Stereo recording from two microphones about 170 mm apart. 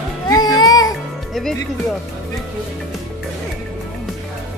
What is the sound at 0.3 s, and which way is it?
Music, 25° left (ahead or behind).